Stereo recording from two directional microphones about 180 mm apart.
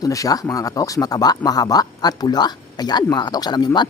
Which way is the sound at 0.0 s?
20° left (ahead or behind).